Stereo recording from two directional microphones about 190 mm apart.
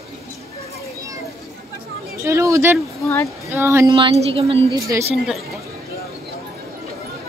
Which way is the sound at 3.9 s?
30° right (ahead or behind).